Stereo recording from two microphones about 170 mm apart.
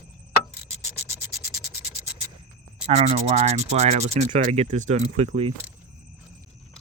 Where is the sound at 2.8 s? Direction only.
35° right (ahead or behind).